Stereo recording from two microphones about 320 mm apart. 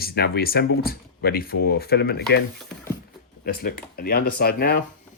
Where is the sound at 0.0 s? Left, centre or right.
Left.